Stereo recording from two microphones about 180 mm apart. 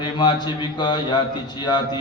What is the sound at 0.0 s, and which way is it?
A man's voice, 25° left (ahead or behind).